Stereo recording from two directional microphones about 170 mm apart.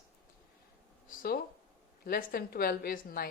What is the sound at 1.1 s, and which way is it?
A woman's voice, 60° left (ahead or behind).